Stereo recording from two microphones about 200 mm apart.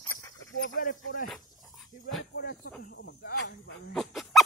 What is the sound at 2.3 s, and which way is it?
Speech, 50° left (ahead or behind).